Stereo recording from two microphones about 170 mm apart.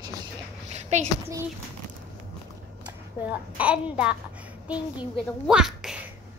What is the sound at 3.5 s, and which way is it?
Speech, 5° right (ahead or behind).